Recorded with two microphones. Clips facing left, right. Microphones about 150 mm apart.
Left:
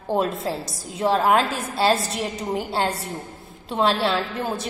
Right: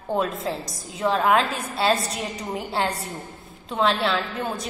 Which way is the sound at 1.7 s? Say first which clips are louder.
Left 2 dB; centre (ahead or behind).